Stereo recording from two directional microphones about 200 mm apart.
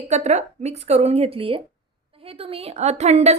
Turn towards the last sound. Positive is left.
turn(degrees=-35)  # may be behind; listen again after turning